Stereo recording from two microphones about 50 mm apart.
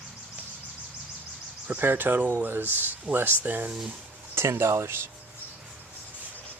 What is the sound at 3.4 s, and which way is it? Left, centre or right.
Speech, right.